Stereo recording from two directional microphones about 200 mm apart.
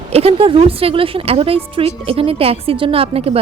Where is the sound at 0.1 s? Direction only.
30° right (ahead or behind).